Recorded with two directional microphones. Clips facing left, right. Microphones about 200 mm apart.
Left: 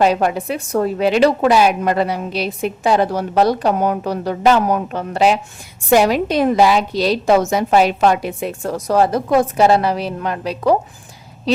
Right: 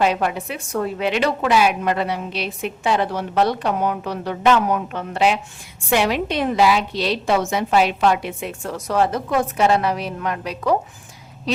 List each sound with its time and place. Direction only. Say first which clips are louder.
0.0 s a woman's voice: left 4 dB; 40° left (ahead or behind)